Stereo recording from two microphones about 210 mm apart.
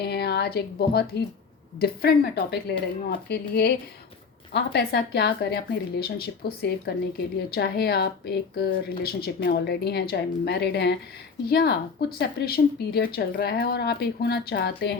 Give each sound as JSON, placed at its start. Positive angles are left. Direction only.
{"t": 0.0, "sound": "a woman's voice", "side_deg": 50}